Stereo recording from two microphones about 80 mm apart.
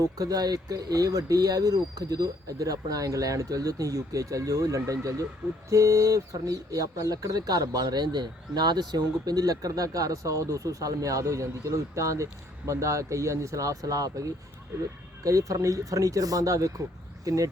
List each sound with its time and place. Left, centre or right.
0.2 s speech: right